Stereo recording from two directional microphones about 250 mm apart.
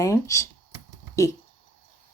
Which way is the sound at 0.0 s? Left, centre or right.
Centre.